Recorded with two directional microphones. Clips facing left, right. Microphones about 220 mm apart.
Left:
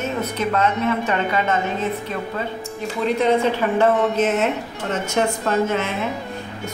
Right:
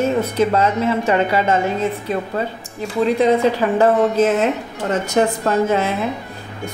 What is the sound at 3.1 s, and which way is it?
A woman's voice, 35° right (ahead or behind).